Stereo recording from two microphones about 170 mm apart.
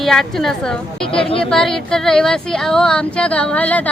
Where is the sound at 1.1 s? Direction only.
35° left (ahead or behind).